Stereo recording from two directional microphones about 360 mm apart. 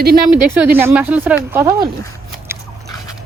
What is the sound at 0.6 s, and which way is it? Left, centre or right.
Speech, centre.